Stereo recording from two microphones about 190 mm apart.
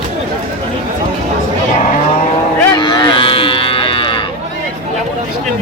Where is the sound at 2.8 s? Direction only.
25° left (ahead or behind).